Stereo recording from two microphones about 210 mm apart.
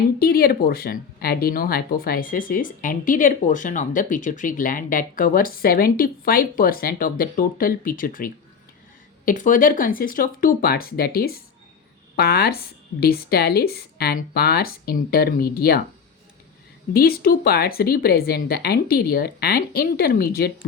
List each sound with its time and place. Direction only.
0.2 s speech: 45° left (ahead or behind)
16.9 s speech: 45° left (ahead or behind)